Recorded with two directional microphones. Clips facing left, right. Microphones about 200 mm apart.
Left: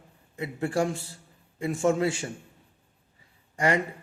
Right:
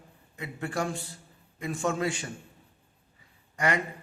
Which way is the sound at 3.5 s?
30° left (ahead or behind).